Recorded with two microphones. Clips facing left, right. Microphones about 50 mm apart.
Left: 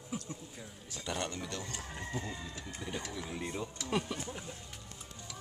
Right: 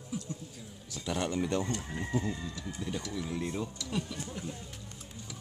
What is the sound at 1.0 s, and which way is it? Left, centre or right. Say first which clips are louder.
Speech: right 4 dB; centre.